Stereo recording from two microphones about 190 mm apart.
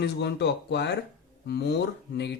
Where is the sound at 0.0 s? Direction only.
60° left (ahead or behind).